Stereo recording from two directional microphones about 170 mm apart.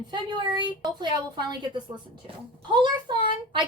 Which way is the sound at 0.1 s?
25° right (ahead or behind).